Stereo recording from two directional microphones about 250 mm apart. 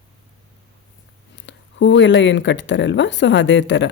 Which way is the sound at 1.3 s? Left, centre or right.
Left.